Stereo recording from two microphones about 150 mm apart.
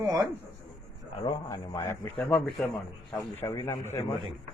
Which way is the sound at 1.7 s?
15° left (ahead or behind).